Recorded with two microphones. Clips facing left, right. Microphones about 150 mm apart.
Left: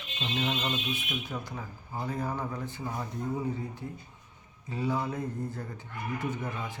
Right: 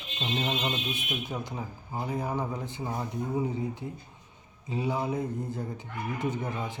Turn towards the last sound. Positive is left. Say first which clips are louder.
# right 3 dB
turn(degrees=-20)  # may be behind; listen again after turning